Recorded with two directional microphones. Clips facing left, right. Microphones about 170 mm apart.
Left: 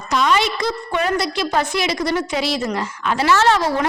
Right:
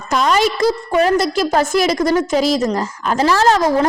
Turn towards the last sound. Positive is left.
turn(degrees=-40)  # may be behind; listen again after turning